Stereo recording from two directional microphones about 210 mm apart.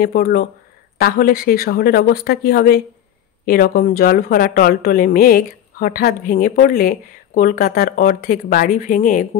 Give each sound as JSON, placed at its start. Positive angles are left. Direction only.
{"t": 0.0, "sound": "speech", "side_deg": 40}